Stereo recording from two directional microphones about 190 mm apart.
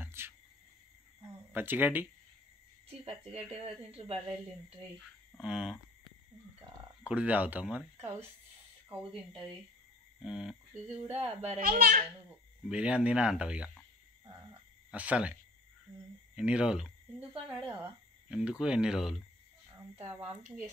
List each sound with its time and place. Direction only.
0.0 s cricket: 15° right (ahead or behind)
1.5 s speech: 10° right (ahead or behind)
3.5 s speech: 30° right (ahead or behind)
5.4 s speech: 5° right (ahead or behind)
7.0 s speech: 5° right (ahead or behind)
10.2 s speech: 5° right (ahead or behind)
11.6 s a child's voice: 50° right (ahead or behind)
12.6 s speech: 5° right (ahead or behind)
14.9 s speech: 5° right (ahead or behind)
16.3 s speech: 5° right (ahead or behind)